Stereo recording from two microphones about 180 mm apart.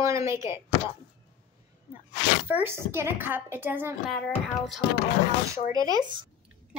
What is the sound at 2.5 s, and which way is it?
A woman's voice, 10° right (ahead or behind).